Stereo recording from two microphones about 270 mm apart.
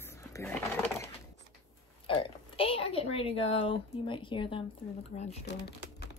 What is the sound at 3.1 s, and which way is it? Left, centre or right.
Speech, left.